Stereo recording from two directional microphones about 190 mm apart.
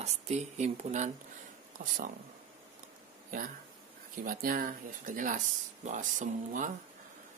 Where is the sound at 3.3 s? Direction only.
45° right (ahead or behind).